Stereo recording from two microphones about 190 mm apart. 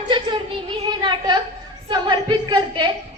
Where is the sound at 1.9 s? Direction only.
20° right (ahead or behind).